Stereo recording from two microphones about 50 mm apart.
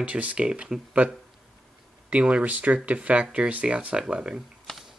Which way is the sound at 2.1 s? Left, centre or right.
Right.